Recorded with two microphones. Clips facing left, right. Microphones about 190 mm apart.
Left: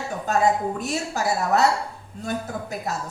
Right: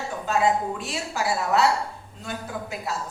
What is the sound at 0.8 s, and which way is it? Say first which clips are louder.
A woman's voice: left 3 dB; 40° left (ahead or behind).